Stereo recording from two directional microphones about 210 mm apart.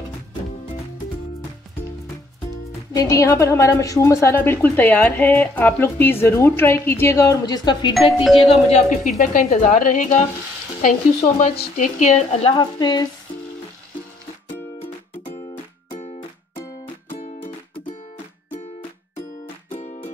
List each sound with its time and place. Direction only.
2.9 s a woman's voice: 15° left (ahead or behind)
7.9 s speech: centre (ahead or behind)
8.4 s a woman's voice: 30° left (ahead or behind)
15.9 s music: 30° left (ahead or behind)
19.7 s music: 35° left (ahead or behind)